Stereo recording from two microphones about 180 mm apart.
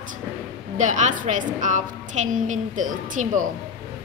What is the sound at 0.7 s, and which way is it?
A woman's voice, 45° right (ahead or behind).